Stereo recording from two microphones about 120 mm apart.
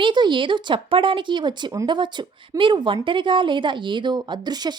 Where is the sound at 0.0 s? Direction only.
40° right (ahead or behind).